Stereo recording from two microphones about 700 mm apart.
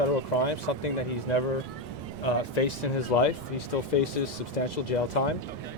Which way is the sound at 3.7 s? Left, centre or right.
Left.